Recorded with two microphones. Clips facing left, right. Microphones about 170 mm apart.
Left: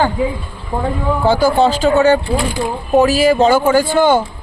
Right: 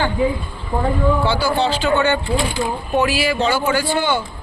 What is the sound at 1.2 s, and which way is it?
Speech, 45° left (ahead or behind).